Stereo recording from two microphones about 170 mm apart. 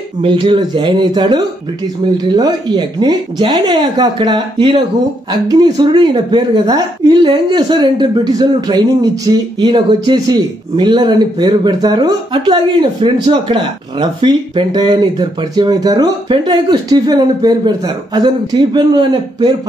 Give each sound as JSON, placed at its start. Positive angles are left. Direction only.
{"t": 0.2, "sound": "speech", "side_deg": -30}